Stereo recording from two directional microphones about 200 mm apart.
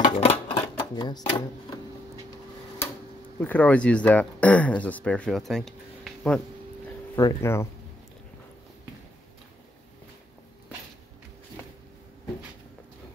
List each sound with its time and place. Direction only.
0.0 s a sound: 25° left (ahead or behind)
3.3 s speech: 10° left (ahead or behind)
7.2 s speech: 15° left (ahead or behind)